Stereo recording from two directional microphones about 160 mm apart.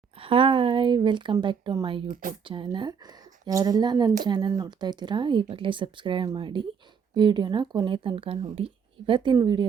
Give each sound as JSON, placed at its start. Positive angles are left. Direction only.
{"t": 0.2, "sound": "a woman's voice", "side_deg": -35}